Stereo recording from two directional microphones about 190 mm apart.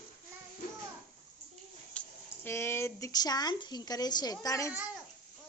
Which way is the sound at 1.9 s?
10° left (ahead or behind).